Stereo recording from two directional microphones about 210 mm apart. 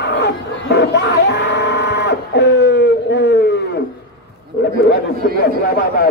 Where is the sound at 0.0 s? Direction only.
55° left (ahead or behind).